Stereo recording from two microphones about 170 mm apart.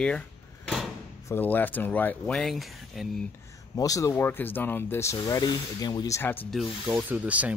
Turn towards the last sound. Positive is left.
turn(degrees=-10)  # may be behind; listen again after turning